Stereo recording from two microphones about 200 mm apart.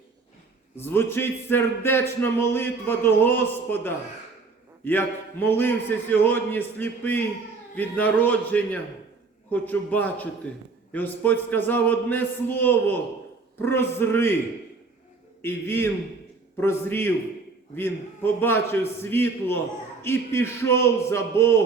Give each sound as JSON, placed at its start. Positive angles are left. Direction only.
{"t": 0.8, "sound": "a man's voice", "side_deg": 10}
{"t": 15.4, "sound": "a man's voice", "side_deg": 10}